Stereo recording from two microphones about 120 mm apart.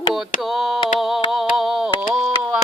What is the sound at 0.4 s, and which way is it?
Mantra, centre (ahead or behind).